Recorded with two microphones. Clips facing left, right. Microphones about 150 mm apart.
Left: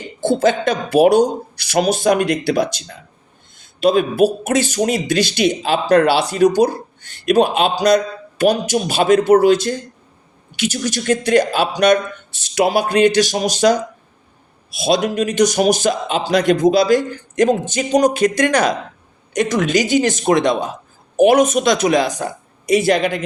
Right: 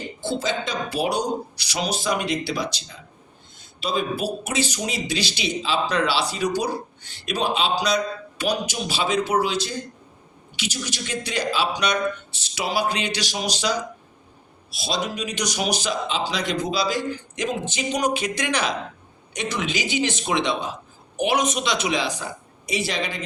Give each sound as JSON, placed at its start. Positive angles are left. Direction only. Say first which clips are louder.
{"t": 0.2, "sound": "speech", "louder": "left 11 dB", "side_deg": 50}
{"t": 14.8, "sound": "speech", "louder": "left 10 dB", "side_deg": 55}